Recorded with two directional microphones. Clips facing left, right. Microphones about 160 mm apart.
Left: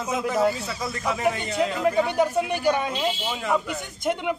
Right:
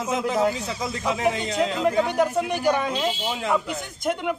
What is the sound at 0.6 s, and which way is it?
Speech, 20° right (ahead or behind).